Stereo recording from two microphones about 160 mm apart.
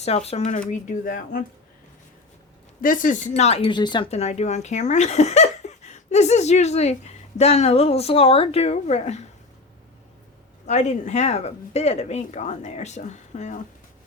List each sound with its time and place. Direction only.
0.0 s speech: 40° left (ahead or behind)
0.7 s speech: 55° left (ahead or behind)
2.8 s speech: 55° left (ahead or behind)
10.7 s speech: 45° left (ahead or behind)